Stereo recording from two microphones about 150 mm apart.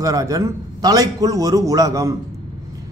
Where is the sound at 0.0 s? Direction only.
25° right (ahead or behind).